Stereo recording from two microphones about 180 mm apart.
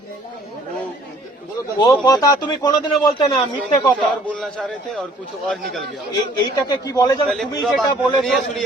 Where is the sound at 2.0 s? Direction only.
20° left (ahead or behind).